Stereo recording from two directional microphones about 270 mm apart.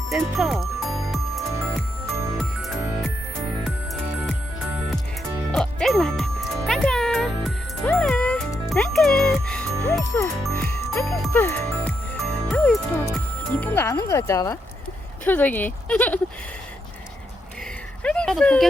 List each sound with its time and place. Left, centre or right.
0.1 s music: centre
5.5 s music: centre
9.8 s speech: centre
18.0 s a sound: centre